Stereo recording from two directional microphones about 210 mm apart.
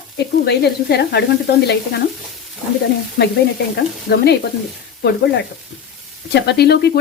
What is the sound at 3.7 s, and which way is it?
Speech, 50° left (ahead or behind).